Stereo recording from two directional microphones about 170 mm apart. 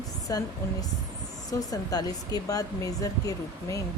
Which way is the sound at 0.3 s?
20° left (ahead or behind).